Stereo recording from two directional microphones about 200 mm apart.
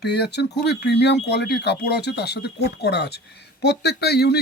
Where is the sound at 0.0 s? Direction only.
55° left (ahead or behind).